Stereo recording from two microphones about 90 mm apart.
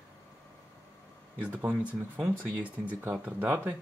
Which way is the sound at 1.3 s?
15° right (ahead or behind).